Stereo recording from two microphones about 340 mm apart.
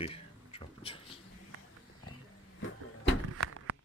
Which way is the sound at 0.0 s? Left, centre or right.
Centre.